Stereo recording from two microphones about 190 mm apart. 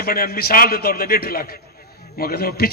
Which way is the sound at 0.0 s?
50° left (ahead or behind).